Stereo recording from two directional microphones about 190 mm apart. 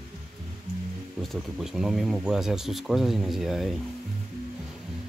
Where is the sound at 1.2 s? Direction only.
Centre (ahead or behind).